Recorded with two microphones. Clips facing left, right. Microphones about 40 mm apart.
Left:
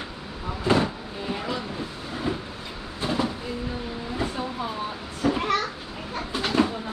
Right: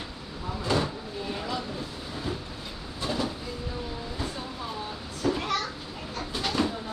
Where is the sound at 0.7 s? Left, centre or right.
Left.